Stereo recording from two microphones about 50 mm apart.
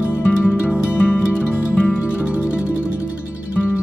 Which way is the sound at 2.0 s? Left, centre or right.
Right.